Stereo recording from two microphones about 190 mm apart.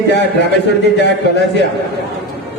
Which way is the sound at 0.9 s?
60° left (ahead or behind).